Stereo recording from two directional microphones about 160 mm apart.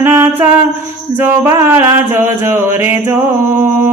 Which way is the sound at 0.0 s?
15° right (ahead or behind).